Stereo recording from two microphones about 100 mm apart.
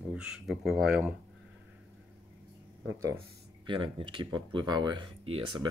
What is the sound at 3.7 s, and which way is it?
Speech, 55° right (ahead or behind).